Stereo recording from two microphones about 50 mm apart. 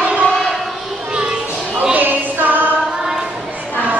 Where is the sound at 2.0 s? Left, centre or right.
Right.